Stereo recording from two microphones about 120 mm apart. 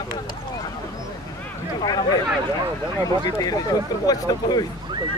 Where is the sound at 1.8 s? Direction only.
35° left (ahead or behind).